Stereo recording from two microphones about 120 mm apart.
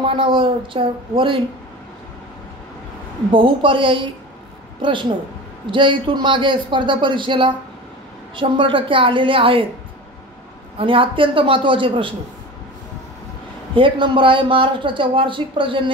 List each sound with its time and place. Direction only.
0.0 s speech: 45° right (ahead or behind)
3.3 s speech: 45° right (ahead or behind)
10.8 s speech: 45° right (ahead or behind)
13.7 s speech: 45° right (ahead or behind)